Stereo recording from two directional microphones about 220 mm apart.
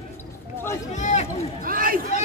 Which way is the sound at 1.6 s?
40° right (ahead or behind).